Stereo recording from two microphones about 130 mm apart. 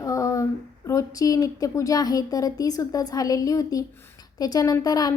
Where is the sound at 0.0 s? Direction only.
25° left (ahead or behind).